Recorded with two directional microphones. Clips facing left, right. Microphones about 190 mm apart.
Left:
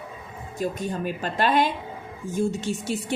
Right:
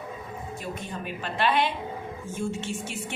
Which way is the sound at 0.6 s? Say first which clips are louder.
Left 11 dB; 40° left (ahead or behind).